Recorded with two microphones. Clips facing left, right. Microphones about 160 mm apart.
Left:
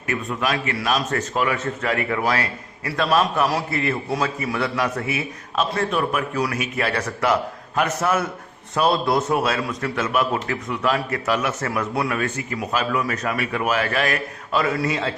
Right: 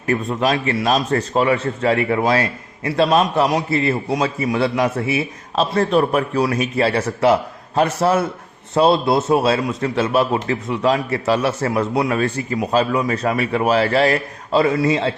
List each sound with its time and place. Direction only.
0.1 s a man's voice: 30° right (ahead or behind)